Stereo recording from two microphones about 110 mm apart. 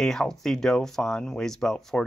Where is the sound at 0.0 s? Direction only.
5° left (ahead or behind).